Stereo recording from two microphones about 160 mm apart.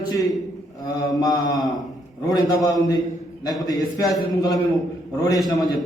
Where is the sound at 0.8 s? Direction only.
25° left (ahead or behind).